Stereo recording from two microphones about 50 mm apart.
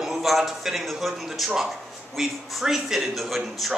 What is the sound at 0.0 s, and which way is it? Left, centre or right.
A man's voice, centre.